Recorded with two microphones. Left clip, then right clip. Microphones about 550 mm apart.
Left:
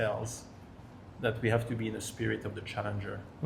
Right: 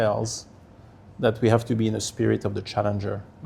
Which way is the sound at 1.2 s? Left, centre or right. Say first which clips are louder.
Right 9 dB; right.